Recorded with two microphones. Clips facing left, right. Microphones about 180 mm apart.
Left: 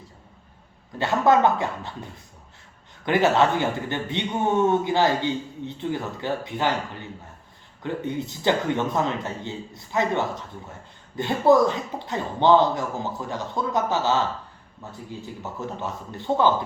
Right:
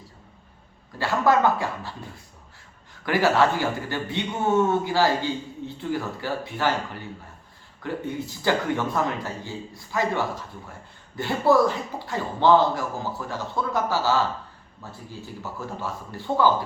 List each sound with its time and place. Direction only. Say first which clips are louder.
0.9 s a man's voice: left 2 dB; 20° left (ahead or behind)
15.5 s a man's voice: left 1 dB; 20° left (ahead or behind)